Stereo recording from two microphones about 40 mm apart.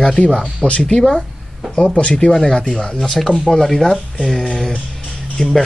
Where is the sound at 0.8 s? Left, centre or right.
Centre.